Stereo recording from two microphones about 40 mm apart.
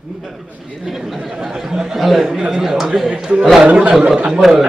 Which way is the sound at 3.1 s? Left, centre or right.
Right.